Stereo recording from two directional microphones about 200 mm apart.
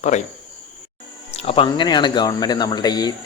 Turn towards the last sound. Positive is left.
turn(degrees=20)  # may be behind; listen again after turning